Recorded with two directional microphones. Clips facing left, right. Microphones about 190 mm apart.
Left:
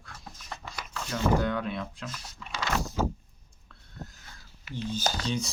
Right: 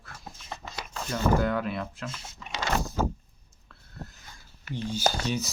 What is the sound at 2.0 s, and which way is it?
Speech, 25° right (ahead or behind).